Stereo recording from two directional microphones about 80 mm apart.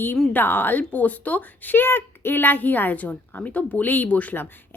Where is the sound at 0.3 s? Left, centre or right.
Left.